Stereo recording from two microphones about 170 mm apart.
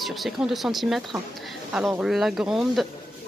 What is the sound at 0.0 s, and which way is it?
A woman's voice, centre (ahead or behind).